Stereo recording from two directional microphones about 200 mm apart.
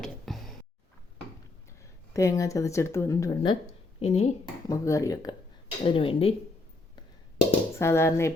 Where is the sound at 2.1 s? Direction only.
15° left (ahead or behind).